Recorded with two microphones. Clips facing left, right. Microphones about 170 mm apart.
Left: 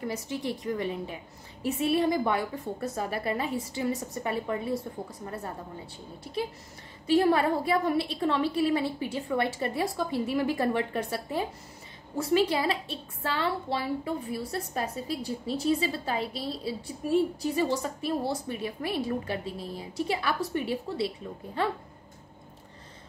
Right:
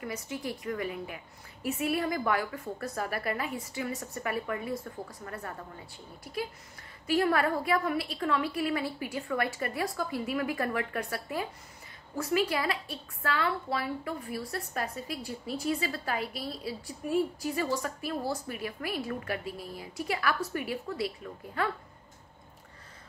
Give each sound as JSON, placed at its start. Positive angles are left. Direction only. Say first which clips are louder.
{"t": 0.0, "sound": "a woman's voice", "louder": "left 4 dB", "side_deg": 30}